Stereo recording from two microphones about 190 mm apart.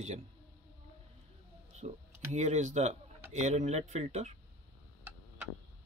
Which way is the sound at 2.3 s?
35° right (ahead or behind).